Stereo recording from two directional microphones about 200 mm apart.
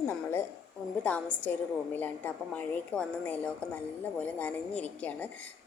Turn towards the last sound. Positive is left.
turn(degrees=10)  # may be behind; listen again after turning